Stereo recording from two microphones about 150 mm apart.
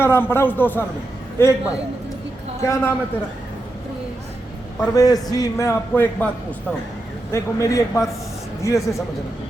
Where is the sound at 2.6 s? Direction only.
20° left (ahead or behind).